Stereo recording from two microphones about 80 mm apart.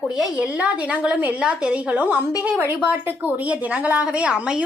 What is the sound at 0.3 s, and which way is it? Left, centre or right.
A woman's voice, centre.